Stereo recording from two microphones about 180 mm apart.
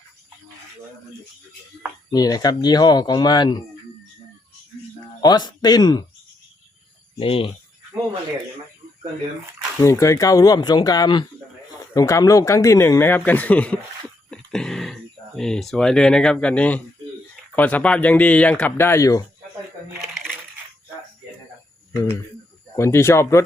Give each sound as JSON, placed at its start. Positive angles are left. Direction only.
{"t": 2.0, "sound": "speech", "side_deg": 20}
{"t": 5.2, "sound": "speech", "side_deg": 20}
{"t": 7.2, "sound": "speech", "side_deg": 30}
{"t": 9.8, "sound": "speech", "side_deg": 15}
{"t": 14.3, "sound": "throat clearing", "side_deg": 5}
{"t": 15.4, "sound": "speech", "side_deg": 5}
{"t": 20.0, "sound": "crushing", "side_deg": 0}
{"t": 22.7, "sound": "speech", "side_deg": 15}